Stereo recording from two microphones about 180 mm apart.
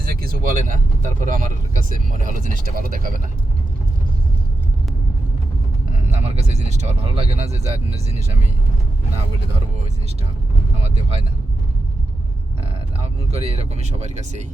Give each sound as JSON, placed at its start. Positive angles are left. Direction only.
{"t": 0.1, "sound": "speech", "side_deg": -55}
{"t": 6.1, "sound": "speech", "side_deg": -35}
{"t": 13.3, "sound": "speech", "side_deg": -35}